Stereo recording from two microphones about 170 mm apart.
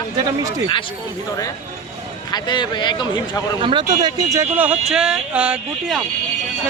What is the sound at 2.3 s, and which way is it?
Speech, 25° left (ahead or behind).